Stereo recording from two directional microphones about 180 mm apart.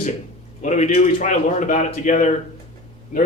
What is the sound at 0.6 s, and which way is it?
A man's voice, 40° left (ahead or behind).